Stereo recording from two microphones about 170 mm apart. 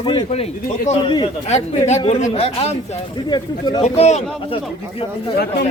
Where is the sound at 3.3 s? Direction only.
25° left (ahead or behind).